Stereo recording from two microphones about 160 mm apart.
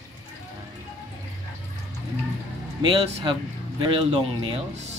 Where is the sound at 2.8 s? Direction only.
30° right (ahead or behind).